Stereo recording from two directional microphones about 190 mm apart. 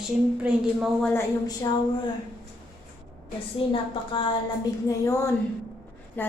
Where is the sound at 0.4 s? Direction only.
Centre (ahead or behind).